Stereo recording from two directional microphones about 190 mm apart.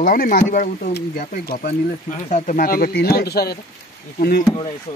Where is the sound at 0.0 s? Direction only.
45° left (ahead or behind).